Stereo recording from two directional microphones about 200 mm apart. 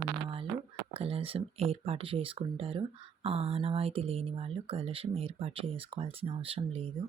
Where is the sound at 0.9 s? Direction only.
30° right (ahead or behind).